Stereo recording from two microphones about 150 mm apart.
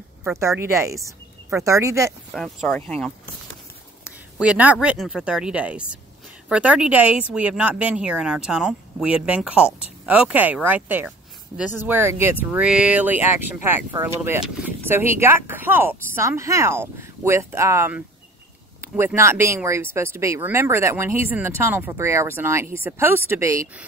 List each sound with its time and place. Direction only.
0.3 s speech: 20° right (ahead or behind)
2.3 s speech: centre (ahead or behind)
4.0 s speech: 5° right (ahead or behind)